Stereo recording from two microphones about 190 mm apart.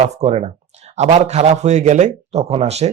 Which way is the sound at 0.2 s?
35° right (ahead or behind).